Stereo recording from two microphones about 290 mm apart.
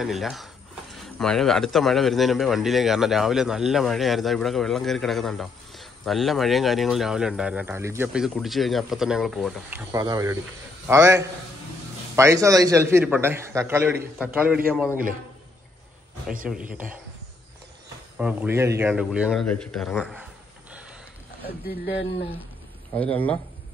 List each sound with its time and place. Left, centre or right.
0.0 s a man's voice: centre
16.4 s a man's voice: centre
18.1 s a man's voice: centre
21.8 s speech: left
22.9 s a man's voice: centre